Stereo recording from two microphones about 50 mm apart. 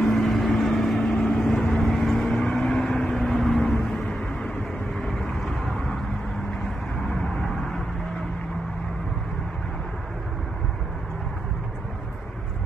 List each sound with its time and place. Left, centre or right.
0.0 s vehicle: centre
0.9 s vehicle: centre
3.7 s vehicle: centre
7.1 s vehicle: centre